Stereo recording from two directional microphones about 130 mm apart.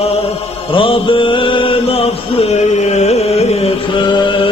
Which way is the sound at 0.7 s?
40° left (ahead or behind).